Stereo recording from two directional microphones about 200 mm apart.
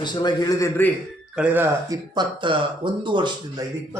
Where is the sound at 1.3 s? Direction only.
5° right (ahead or behind).